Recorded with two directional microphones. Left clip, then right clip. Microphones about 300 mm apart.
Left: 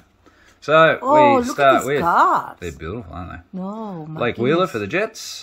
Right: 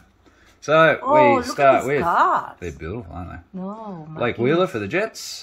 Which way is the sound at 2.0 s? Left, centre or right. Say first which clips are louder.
Left 2 dB; left.